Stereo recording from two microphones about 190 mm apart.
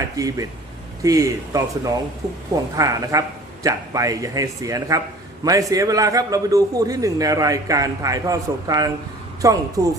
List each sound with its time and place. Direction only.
0.2 s a man's voice: 20° right (ahead or behind)